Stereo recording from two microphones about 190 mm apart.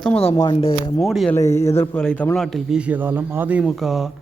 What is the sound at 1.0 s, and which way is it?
Speech, centre (ahead or behind).